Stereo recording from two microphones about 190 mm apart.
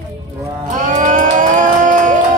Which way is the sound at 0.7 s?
40° right (ahead or behind).